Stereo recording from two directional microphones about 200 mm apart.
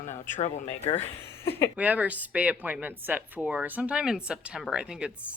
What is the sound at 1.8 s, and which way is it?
Speech, 10° right (ahead or behind).